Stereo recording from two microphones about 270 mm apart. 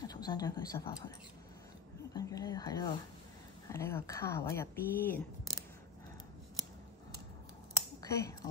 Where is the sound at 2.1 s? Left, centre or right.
Centre.